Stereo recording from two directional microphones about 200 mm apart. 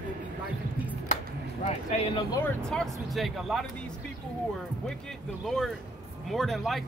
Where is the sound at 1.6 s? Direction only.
35° left (ahead or behind).